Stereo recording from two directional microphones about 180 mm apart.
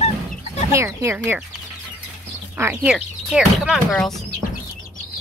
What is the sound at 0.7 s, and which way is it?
Speech, 15° right (ahead or behind).